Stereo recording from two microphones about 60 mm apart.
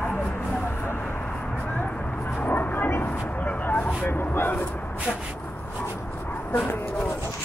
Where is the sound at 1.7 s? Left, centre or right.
Left.